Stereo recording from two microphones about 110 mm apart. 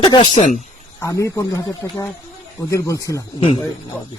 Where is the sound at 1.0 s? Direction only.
30° left (ahead or behind).